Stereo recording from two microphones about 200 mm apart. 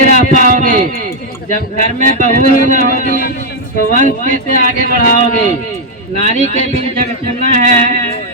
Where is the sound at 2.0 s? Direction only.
40° right (ahead or behind).